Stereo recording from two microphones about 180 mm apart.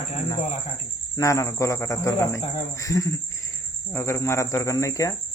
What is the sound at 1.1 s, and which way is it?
Speech, 15° left (ahead or behind).